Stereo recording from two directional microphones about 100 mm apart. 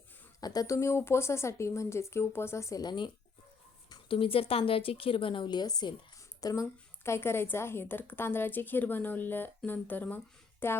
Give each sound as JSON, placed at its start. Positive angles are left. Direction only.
{"t": 0.3, "sound": "a woman's voice", "side_deg": 40}
{"t": 2.8, "sound": "speech", "side_deg": 50}
{"t": 4.1, "sound": "a woman's voice", "side_deg": 70}
{"t": 6.4, "sound": "a woman's voice", "side_deg": 30}